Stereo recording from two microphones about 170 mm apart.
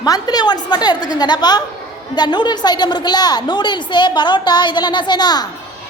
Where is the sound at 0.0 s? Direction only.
20° left (ahead or behind).